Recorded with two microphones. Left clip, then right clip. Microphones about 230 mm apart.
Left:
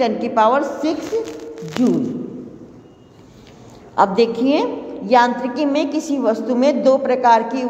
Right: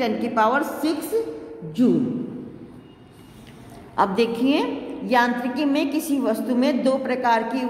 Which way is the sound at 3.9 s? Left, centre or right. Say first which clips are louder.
Left 5 dB; centre.